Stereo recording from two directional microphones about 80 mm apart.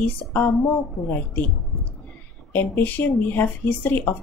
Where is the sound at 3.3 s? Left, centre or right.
Left.